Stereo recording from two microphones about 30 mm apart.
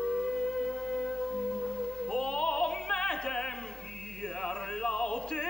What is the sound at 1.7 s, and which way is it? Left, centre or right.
Opera, left.